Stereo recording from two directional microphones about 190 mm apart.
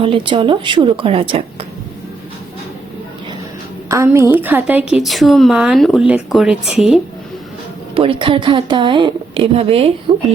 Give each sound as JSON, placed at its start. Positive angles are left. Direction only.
{"t": 0.0, "sound": "a woman's voice", "side_deg": -25}
{"t": 3.8, "sound": "a woman's voice", "side_deg": -15}
{"t": 7.9, "sound": "a woman's voice", "side_deg": -30}